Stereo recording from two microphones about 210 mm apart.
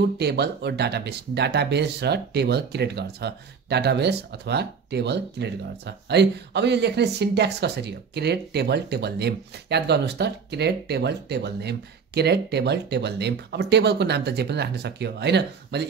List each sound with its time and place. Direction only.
0.2 s speech: 55° right (ahead or behind)